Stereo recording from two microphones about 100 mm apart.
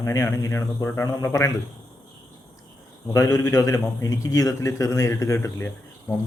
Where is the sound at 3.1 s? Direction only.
30° left (ahead or behind).